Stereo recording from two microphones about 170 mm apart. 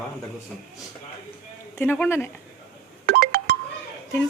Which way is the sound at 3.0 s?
65° right (ahead or behind).